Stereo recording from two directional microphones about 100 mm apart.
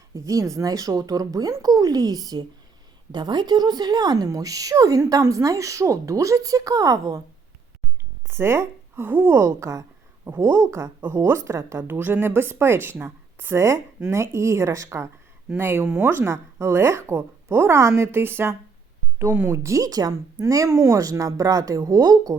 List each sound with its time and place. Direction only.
0.1 s speech: 35° right (ahead or behind)
8.3 s a woman's voice: 25° right (ahead or behind); by 22.4 s 40° right (ahead or behind)